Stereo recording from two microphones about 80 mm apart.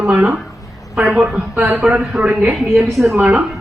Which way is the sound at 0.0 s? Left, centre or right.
Centre.